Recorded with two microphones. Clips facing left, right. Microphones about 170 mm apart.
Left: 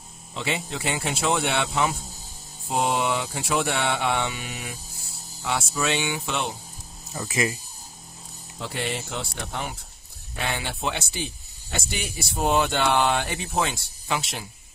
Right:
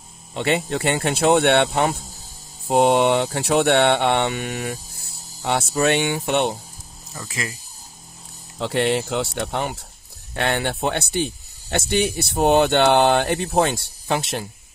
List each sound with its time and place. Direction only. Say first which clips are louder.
0.4 s speech: right 8 dB; 70° right (ahead or behind); by 6.2 s 55° right (ahead or behind)
7.2 s speech: left 5 dB; 20° left (ahead or behind)
8.5 s speech: right 10 dB; 90° right
10.3 s speech: right 8 dB; 70° right (ahead or behind)